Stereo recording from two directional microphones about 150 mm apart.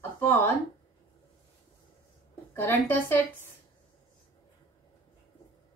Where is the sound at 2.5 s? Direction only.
15° left (ahead or behind).